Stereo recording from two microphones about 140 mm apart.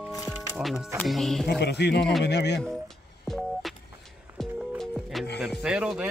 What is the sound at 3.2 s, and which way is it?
Telephone dialing, centre (ahead or behind).